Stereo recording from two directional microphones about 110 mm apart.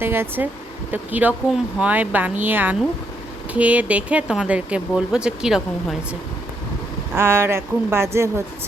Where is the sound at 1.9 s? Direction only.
15° right (ahead or behind).